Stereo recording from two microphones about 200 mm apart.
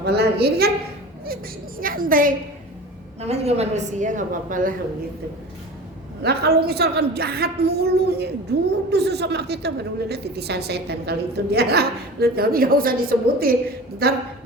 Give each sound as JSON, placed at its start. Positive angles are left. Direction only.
{"t": 0.0, "sound": "a woman's voice", "side_deg": -55}
{"t": 1.8, "sound": "a woman's voice", "side_deg": -45}
{"t": 3.2, "sound": "a woman's voice", "side_deg": -30}
{"t": 6.2, "sound": "a woman's voice", "side_deg": -55}